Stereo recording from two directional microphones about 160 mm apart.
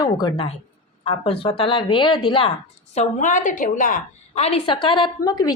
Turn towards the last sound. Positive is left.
turn(degrees=25)  # may be behind; listen again after turning